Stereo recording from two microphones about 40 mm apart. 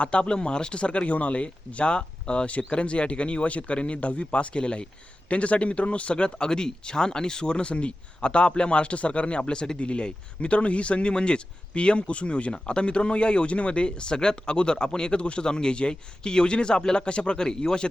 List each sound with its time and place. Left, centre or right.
0.0 s speech: left
9.4 s speech: centre
17.3 s a man's voice: centre